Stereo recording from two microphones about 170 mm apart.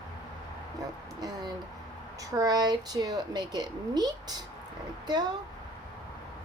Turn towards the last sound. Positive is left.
turn(degrees=-25)  # may be behind; listen again after turning